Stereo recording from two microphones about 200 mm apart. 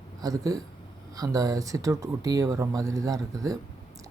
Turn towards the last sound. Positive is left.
turn(degrees=-15)  # may be behind; listen again after turning